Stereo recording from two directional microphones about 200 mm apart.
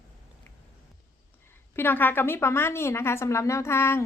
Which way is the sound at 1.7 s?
10° left (ahead or behind).